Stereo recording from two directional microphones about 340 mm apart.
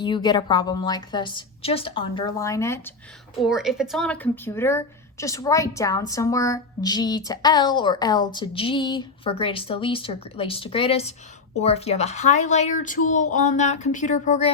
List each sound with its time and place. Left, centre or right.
0.0 s a woman's voice: centre